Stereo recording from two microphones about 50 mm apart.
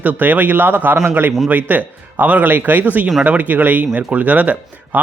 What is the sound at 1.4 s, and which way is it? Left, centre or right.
Speech, right.